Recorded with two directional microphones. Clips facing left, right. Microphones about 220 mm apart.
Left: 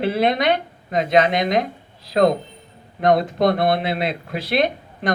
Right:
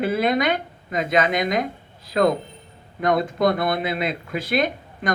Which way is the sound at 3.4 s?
50° right (ahead or behind).